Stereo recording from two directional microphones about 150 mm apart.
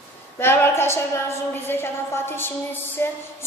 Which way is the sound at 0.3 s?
15° left (ahead or behind).